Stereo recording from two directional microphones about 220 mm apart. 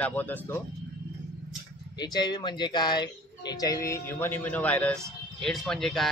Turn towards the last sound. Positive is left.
turn(degrees=0)  # may be behind; listen again after turning